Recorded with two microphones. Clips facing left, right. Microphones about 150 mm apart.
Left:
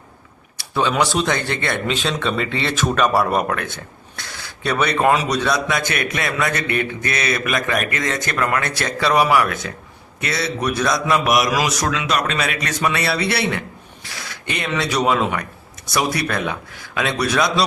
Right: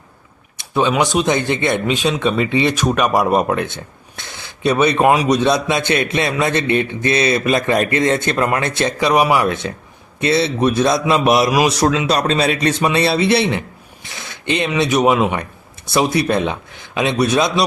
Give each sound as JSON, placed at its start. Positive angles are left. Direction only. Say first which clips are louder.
{"t": 0.5, "sound": "a man's voice", "louder": "right 3 dB", "side_deg": -20}